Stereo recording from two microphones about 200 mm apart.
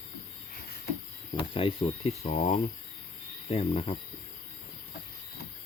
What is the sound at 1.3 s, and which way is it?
Speech, 25° left (ahead or behind).